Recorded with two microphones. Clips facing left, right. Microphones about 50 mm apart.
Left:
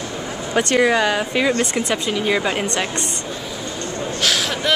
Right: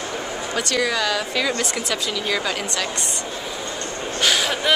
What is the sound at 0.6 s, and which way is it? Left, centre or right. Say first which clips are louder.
A woman's voice: left 7 dB; left.